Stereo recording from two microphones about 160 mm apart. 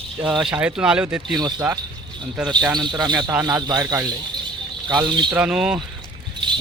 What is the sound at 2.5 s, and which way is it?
Speech, 25° right (ahead or behind).